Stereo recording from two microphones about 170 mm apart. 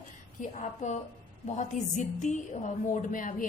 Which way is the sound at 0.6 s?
45° left (ahead or behind).